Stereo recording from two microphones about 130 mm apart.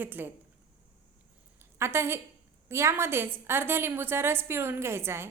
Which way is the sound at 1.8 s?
20° right (ahead or behind).